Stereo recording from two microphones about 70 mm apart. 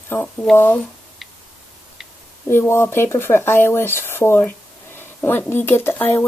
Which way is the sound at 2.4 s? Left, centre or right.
Left.